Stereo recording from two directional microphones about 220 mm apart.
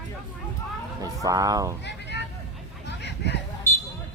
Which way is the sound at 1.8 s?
50° left (ahead or behind).